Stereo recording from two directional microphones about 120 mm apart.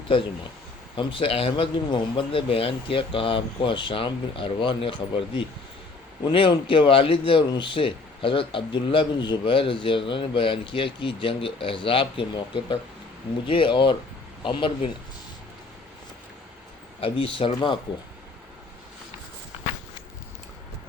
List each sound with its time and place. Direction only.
0.9 s speech: 45° left (ahead or behind)
17.0 s speech: 45° left (ahead or behind)